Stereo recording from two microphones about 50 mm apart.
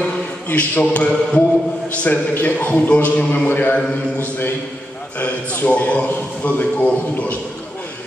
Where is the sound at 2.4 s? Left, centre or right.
Left.